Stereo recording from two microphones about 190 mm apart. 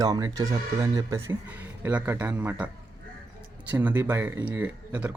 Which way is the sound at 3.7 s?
10° right (ahead or behind).